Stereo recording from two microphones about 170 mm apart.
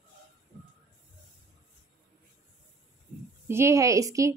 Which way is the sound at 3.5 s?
15° right (ahead or behind).